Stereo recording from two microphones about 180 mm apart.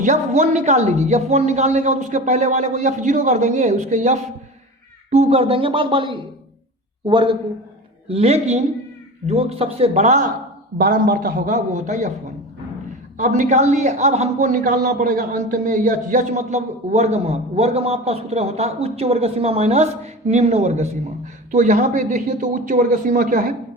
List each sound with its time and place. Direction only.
0.0 s a man's voice: 40° right (ahead or behind)
10.8 s speech: 55° right (ahead or behind)
13.1 s a man's voice: 45° right (ahead or behind)